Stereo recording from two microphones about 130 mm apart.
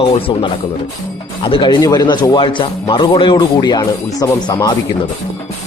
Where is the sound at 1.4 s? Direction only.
40° left (ahead or behind).